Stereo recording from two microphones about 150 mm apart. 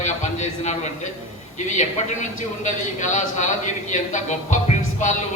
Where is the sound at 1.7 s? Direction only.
55° left (ahead or behind).